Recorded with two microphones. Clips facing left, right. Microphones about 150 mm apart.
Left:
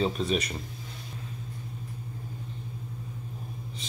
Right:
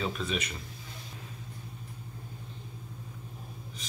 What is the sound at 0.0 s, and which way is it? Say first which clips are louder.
Speech: left 6 dB; 35° left (ahead or behind).